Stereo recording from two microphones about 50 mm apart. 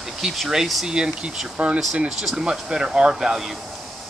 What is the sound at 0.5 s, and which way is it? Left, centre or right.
Speech, centre.